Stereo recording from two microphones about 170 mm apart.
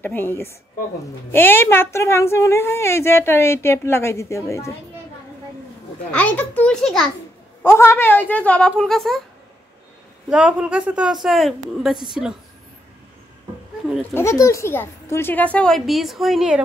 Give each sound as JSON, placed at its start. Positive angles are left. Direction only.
{"t": 0.0, "sound": "a woman's voice", "side_deg": 15}
{"t": 6.1, "sound": "a woman's voice", "side_deg": 10}
{"t": 7.6, "sound": "a woman's voice", "side_deg": 15}
{"t": 10.3, "sound": "speech", "side_deg": -5}
{"t": 14.1, "sound": "a woman's voice", "side_deg": 15}